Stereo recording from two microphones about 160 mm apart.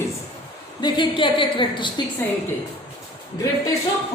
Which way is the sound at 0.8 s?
30° left (ahead or behind).